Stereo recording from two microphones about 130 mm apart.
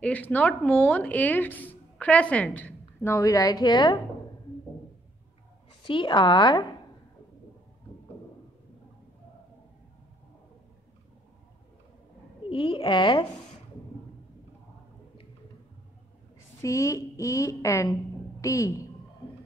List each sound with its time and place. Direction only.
0.0 s a woman's voice: 10° left (ahead or behind); by 4.0 s 35° left (ahead or behind)
5.9 s a woman's voice: 40° left (ahead or behind)
12.4 s a woman's voice: 45° left (ahead or behind)
16.6 s a woman's voice: 25° left (ahead or behind)